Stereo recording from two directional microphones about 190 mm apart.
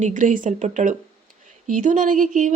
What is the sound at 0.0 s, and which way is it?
A woman's voice, 40° right (ahead or behind).